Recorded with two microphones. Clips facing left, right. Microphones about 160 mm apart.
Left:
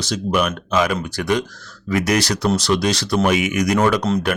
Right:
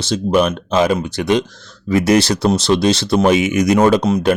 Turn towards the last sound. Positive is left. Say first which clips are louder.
# right 5 dB
turn(degrees=-25)  # may be behind; listen again after turning